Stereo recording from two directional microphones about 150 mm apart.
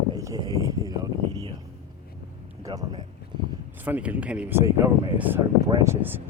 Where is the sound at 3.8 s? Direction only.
10° right (ahead or behind).